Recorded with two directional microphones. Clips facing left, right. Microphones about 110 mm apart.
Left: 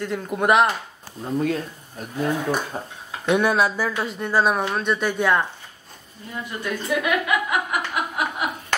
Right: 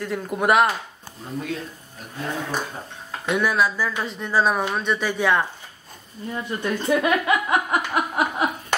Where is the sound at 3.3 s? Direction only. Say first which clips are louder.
Left 2 dB; 30° left (ahead or behind).